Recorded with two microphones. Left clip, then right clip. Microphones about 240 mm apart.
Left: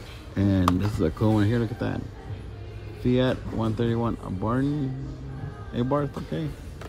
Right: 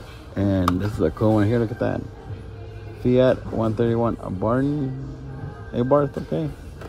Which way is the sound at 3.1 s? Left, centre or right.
Centre.